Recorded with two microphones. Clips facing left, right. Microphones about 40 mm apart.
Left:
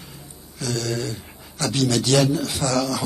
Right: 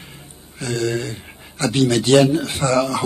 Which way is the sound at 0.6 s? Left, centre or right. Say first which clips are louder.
Right 4 dB; right.